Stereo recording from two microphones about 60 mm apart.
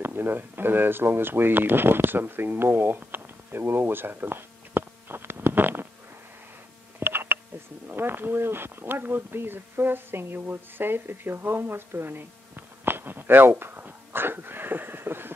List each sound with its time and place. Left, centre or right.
0.0 s speech: right
7.0 s a sound: right
7.9 s speech: right